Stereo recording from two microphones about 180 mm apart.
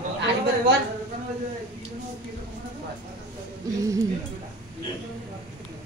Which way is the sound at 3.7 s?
20° right (ahead or behind).